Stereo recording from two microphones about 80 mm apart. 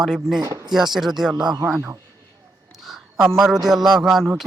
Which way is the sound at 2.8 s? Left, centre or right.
Centre.